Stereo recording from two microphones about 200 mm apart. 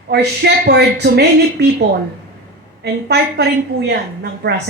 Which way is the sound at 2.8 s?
55° right (ahead or behind).